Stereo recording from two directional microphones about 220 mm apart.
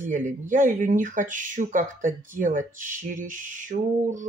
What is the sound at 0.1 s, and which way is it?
Speech, 35° right (ahead or behind).